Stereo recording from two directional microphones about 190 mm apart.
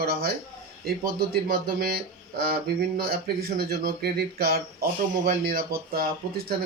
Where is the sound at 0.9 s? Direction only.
55° right (ahead or behind).